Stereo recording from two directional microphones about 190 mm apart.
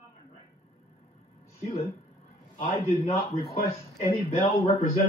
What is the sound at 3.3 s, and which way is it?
Speech, 30° left (ahead or behind).